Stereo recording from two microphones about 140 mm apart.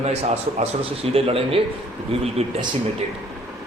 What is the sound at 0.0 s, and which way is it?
A man's voice, 50° right (ahead or behind).